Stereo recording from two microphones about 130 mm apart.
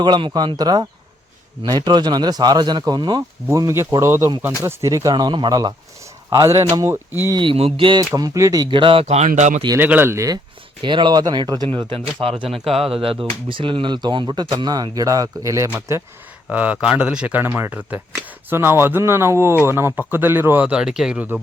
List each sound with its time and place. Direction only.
0.0 s speech: 35° right (ahead or behind); by 7.3 s 20° right (ahead or behind)
7.3 s speech: 45° right (ahead or behind)
8.1 s speech: 25° right (ahead or behind); by 9.6 s 70° right (ahead or behind)
9.7 s speech: 15° right (ahead or behind)
10.8 s speech: 35° right (ahead or behind)
16.5 s speech: 10° right (ahead or behind)